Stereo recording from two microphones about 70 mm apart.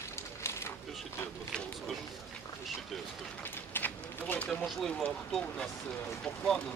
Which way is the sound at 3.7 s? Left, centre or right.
Left.